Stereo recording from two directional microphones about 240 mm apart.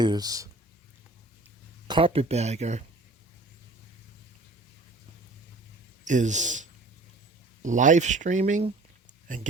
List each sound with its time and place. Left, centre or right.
0.0 s speech: centre
1.9 s speech: right
6.1 s speech: right